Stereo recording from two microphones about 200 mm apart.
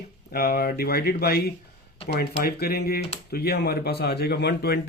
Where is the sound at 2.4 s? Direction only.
50° left (ahead or behind).